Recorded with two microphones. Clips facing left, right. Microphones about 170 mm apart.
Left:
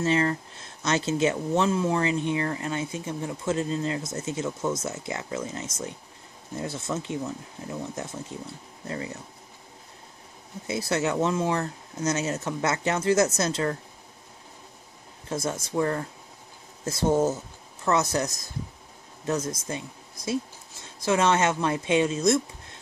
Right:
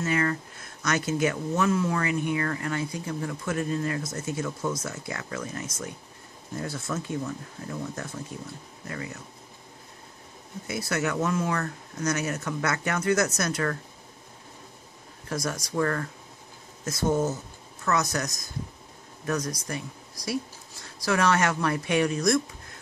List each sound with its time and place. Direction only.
0.0 s speech: 25° left (ahead or behind)
10.7 s speech: 25° left (ahead or behind)
15.2 s speech: 25° left (ahead or behind)